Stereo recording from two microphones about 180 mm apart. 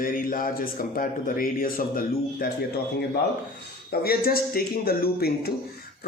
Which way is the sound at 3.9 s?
55° left (ahead or behind).